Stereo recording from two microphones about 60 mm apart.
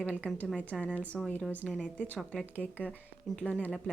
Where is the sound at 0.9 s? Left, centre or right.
Left.